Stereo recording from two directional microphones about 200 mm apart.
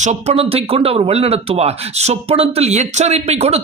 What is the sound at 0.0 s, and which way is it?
Speech, 35° right (ahead or behind).